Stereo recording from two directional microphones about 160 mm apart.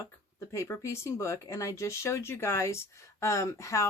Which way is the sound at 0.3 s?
15° left (ahead or behind).